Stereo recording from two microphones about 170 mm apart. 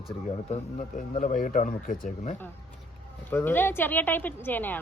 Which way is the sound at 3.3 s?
10° left (ahead or behind).